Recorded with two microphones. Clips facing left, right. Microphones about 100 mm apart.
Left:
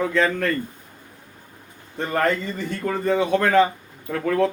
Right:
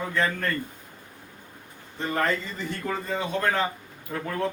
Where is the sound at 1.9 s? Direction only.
55° left (ahead or behind).